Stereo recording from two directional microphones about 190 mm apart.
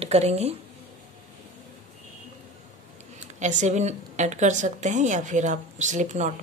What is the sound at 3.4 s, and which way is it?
A woman's voice, 40° right (ahead or behind).